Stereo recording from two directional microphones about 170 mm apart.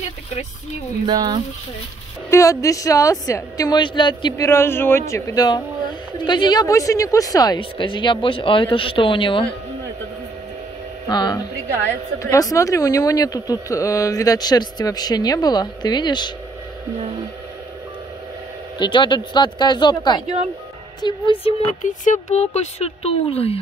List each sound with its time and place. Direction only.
1.0 s speech: 25° right (ahead or behind)
2.3 s speech: 20° left (ahead or behind)
11.1 s speech: 25° left (ahead or behind)
18.8 s speech: 25° left (ahead or behind)
21.8 s speech: 45° left (ahead or behind)